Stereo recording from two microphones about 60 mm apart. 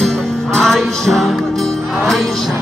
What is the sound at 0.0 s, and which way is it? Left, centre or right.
Music, centre.